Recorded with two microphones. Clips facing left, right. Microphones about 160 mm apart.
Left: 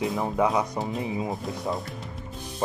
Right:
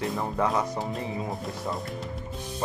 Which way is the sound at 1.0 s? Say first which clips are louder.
Left 3 dB; 15° left (ahead or behind).